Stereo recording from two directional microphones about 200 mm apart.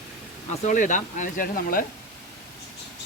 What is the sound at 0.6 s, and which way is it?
Speech, 40° left (ahead or behind).